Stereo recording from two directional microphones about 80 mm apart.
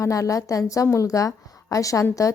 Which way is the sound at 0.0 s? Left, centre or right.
Left.